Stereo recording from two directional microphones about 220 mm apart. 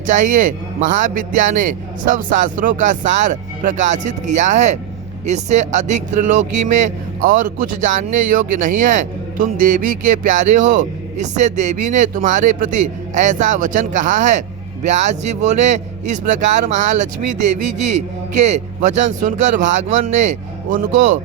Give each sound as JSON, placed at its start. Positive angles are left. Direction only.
{"t": 0.1, "sound": "speech", "side_deg": -35}